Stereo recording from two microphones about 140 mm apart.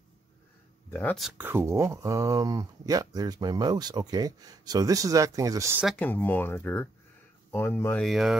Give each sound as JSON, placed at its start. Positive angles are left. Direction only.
{"t": 0.8, "sound": "speech", "side_deg": 10}
{"t": 1.4, "sound": "speech", "side_deg": -15}
{"t": 5.9, "sound": "speech", "side_deg": 10}
{"t": 8.0, "sound": "speech", "side_deg": 0}